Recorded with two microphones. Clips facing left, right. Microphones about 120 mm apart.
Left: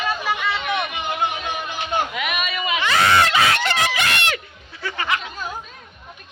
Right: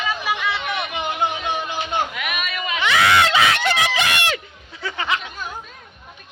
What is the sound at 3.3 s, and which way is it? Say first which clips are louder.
Screaming: right 1 dB; 15° right (ahead or behind).